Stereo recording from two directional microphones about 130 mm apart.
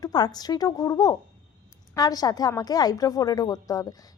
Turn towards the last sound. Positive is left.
turn(degrees=30)  # may be behind; listen again after turning